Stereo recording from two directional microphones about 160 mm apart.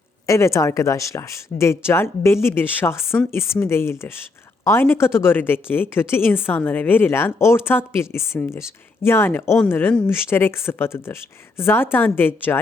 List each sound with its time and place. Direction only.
0.3 s a woman's voice: 20° left (ahead or behind)